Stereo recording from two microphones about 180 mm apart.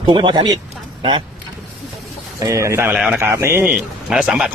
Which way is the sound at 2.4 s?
15° right (ahead or behind).